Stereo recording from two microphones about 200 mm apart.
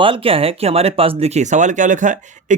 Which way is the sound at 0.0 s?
25° right (ahead or behind).